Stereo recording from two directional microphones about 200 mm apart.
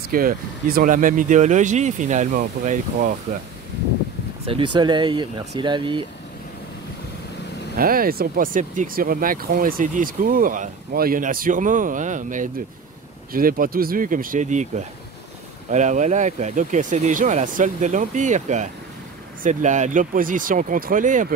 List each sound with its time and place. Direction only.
0.1 s speech: 45° right (ahead or behind)
4.5 s speech: 25° right (ahead or behind)
7.7 s speech: 45° right (ahead or behind)
15.7 s speech: 35° right (ahead or behind)